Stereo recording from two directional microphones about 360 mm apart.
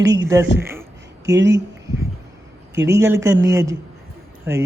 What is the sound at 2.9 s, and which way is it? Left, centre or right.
Speech, centre.